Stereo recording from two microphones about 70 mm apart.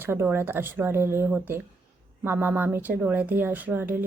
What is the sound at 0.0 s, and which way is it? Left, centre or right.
A woman's voice, right.